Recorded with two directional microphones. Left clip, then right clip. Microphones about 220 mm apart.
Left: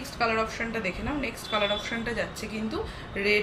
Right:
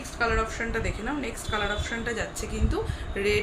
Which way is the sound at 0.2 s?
10° right (ahead or behind).